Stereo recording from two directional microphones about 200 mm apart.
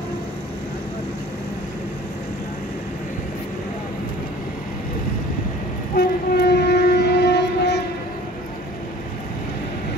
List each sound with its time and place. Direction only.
5.9 s train: 55° left (ahead or behind)